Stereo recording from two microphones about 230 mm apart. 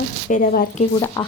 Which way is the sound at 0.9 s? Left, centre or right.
Centre.